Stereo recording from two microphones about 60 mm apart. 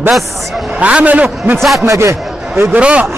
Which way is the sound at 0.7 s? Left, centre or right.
Right.